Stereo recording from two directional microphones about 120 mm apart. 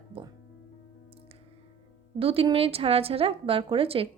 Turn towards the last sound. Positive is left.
turn(degrees=-50)  # may be behind; listen again after turning